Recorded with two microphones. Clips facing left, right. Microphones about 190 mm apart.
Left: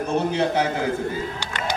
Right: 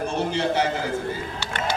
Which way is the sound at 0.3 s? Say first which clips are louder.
Left 1 dB; 55° left (ahead or behind).